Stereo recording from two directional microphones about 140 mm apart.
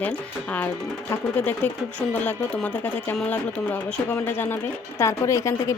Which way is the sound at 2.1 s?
10° left (ahead or behind).